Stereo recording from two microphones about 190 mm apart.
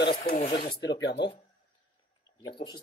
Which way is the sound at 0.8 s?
65° left (ahead or behind).